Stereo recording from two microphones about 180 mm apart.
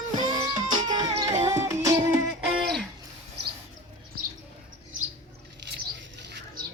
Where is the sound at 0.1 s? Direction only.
20° right (ahead or behind).